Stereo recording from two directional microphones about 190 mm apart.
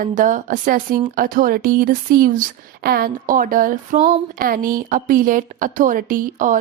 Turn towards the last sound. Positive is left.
turn(degrees=-45)  # may be behind; listen again after turning